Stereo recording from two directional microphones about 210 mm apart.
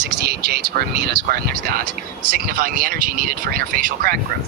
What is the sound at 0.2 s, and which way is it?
Speech, 50° right (ahead or behind).